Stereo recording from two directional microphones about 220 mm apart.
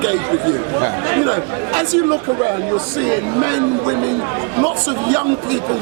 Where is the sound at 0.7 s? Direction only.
20° right (ahead or behind).